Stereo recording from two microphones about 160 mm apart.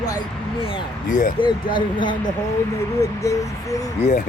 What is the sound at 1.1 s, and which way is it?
Speech, 55° left (ahead or behind).